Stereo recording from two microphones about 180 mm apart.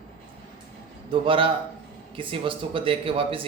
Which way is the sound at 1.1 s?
30° right (ahead or behind).